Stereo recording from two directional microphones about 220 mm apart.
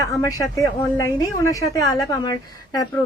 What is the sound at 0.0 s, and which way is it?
A woman's voice, 15° left (ahead or behind).